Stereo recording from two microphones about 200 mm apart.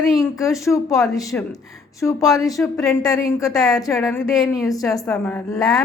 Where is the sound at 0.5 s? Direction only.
15° left (ahead or behind).